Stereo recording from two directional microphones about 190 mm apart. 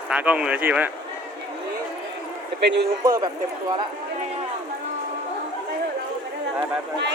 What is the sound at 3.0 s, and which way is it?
Speech, 20° right (ahead or behind).